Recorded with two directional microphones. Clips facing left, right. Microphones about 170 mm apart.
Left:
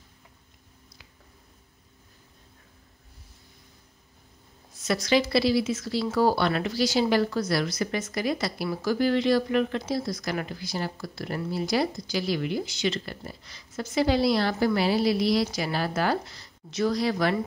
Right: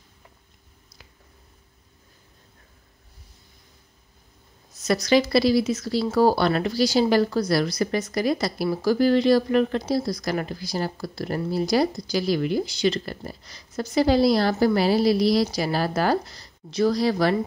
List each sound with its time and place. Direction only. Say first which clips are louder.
4.7 s speech: right 4 dB; 40° right (ahead or behind)